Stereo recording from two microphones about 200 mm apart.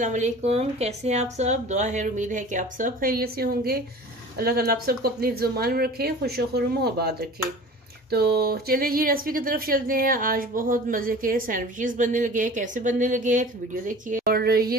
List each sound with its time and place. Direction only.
0.0 s speech: 35° right (ahead or behind)